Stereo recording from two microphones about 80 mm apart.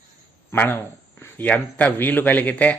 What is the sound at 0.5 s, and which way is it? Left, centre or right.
Speech, left.